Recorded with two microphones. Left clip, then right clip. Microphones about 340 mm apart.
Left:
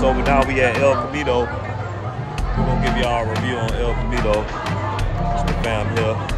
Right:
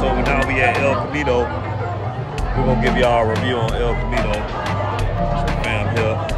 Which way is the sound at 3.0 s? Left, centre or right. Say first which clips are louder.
Right 5 dB; centre.